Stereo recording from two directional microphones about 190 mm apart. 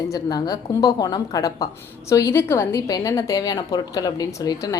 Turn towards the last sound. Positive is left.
turn(degrees=20)  # may be behind; listen again after turning